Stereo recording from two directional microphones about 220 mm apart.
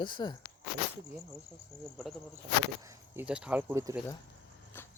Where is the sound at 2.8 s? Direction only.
10° right (ahead or behind).